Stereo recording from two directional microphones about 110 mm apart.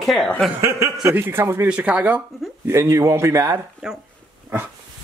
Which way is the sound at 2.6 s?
25° right (ahead or behind).